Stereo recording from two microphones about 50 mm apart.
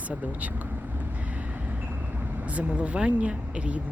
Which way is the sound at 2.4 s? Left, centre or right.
Right.